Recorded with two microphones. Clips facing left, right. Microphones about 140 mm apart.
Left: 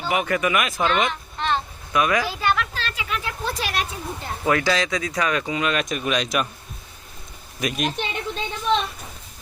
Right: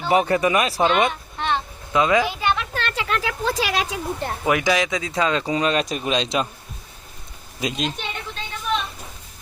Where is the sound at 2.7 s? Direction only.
60° right (ahead or behind); by 4.3 s 90° right.